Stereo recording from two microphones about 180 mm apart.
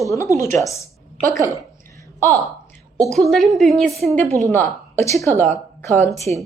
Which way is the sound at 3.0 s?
Centre (ahead or behind).